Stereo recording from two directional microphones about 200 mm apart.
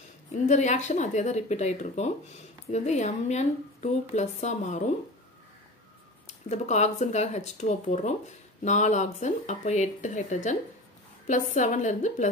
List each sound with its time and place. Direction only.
0.3 s speech: 35° left (ahead or behind)
6.2 s speech: 35° left (ahead or behind)